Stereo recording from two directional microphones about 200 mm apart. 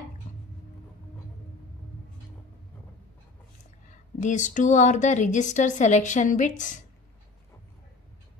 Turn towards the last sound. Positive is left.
turn(degrees=40)  # may be behind; listen again after turning